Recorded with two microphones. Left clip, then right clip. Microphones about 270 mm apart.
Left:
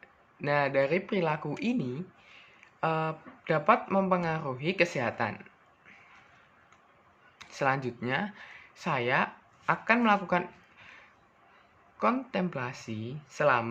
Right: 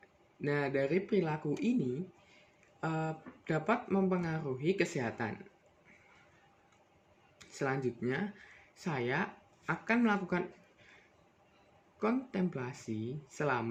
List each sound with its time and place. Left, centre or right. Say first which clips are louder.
0.4 s speech: left 7 dB; centre
7.3 s speech: left 7 dB; centre
11.9 s speech: left 6 dB; centre